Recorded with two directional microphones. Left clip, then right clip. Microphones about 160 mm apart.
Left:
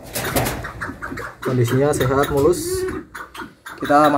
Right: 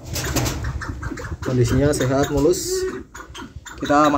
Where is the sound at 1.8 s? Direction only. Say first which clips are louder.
Left 3 dB; 20° left (ahead or behind).